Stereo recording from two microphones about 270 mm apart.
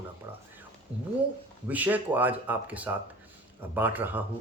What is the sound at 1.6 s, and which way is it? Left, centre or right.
Speech, centre.